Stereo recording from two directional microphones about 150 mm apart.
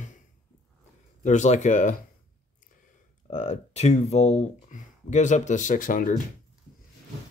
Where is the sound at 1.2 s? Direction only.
55° left (ahead or behind).